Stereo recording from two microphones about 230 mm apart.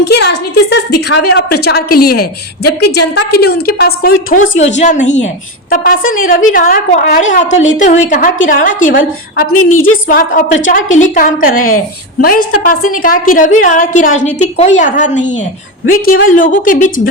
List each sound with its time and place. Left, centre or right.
0.1 s a woman's voice: left
4.6 s a woman's voice: left
9.5 s a woman's voice: left
10.1 s a woman's voice: left